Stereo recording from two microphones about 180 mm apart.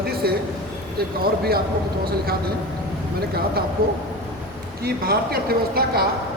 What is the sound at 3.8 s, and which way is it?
Speech, 55° right (ahead or behind).